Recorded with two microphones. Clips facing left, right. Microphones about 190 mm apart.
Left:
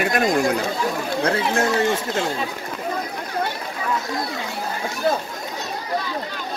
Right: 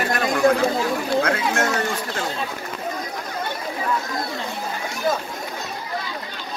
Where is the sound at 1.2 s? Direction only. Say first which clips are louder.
Left 3 dB; 30° left (ahead or behind).